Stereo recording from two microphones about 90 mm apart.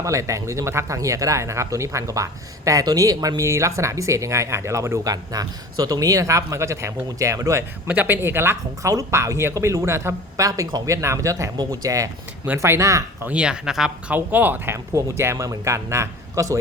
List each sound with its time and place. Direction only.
0.0 s speech: 35° right (ahead or behind)
7.9 s speech: 20° right (ahead or behind); by 10.8 s 45° right (ahead or behind)
10.8 s speech: 35° right (ahead or behind)
13.2 s speech: 10° right (ahead or behind)
14.1 s speech: 20° right (ahead or behind)
14.9 s speech: 30° right (ahead or behind)